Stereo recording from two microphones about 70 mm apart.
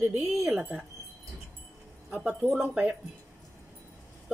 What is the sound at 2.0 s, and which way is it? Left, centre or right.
Speech, centre.